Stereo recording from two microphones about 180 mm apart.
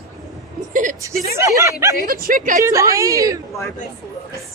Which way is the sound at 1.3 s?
15° right (ahead or behind).